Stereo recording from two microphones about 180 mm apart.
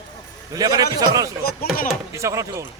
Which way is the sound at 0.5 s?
20° right (ahead or behind).